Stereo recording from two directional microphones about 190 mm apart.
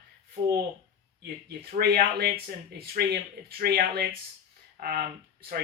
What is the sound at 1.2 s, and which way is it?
Speech, 55° right (ahead or behind).